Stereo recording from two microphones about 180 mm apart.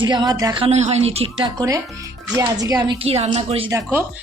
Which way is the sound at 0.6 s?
35° right (ahead or behind).